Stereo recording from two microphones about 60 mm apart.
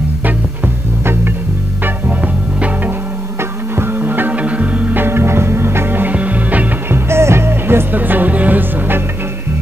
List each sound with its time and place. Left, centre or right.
3.7 s music: right
5.0 s music: right
6.9 s music: right